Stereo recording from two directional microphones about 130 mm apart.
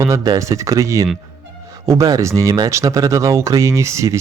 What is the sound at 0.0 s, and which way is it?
Speech, 25° right (ahead or behind).